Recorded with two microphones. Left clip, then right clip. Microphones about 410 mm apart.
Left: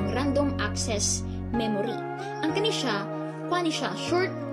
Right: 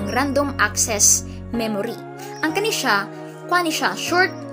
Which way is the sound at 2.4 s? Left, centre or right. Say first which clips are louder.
Right 6 dB; left.